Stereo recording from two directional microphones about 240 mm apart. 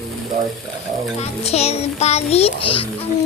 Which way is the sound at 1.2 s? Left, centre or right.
Left.